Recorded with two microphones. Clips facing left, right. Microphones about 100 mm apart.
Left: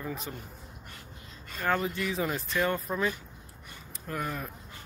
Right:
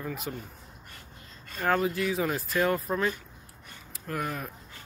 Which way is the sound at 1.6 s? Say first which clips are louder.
Right 3 dB; 5° right (ahead or behind).